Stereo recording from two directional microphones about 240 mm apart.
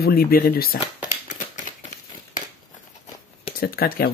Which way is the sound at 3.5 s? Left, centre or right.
Left.